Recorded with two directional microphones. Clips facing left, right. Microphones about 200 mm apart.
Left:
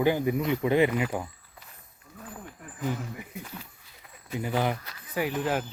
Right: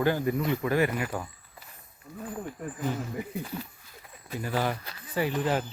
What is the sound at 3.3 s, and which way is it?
Speech, 35° right (ahead or behind).